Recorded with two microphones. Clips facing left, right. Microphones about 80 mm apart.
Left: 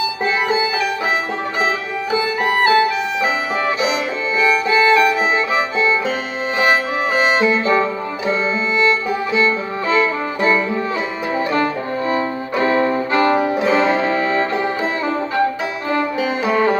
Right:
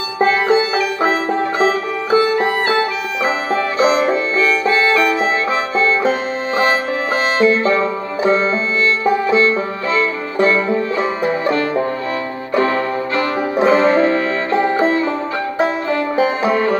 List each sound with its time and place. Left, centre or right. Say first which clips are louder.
1.6 s music: right 4 dB; right
3.8 s music: right 6 dB; right
4.4 s music: left 3 dB; centre
7.2 s music: right 2 dB; centre
9.8 s music: left 3 dB; centre
12.6 s brass instrument: left 2 dB; left
13.6 s music: right 4 dB; right